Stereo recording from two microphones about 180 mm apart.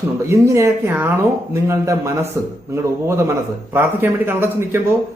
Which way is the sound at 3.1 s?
15° right (ahead or behind).